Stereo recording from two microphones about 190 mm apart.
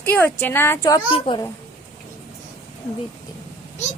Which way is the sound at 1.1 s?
25° left (ahead or behind).